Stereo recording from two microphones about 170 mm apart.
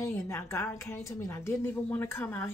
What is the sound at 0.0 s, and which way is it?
Speech, 15° left (ahead or behind).